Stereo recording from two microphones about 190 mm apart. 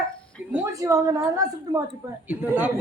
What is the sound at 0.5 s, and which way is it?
A man's voice, 15° right (ahead or behind).